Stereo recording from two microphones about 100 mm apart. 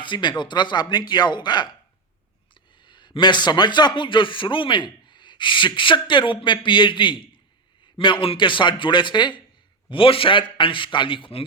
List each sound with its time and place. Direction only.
0.0 s a man's voice: 50° left (ahead or behind)
2.8 s a man's voice: 50° left (ahead or behind)
9.9 s a man's voice: 65° left (ahead or behind)